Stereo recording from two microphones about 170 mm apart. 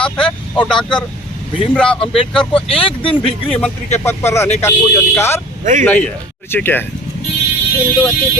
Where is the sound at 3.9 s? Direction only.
15° left (ahead or behind).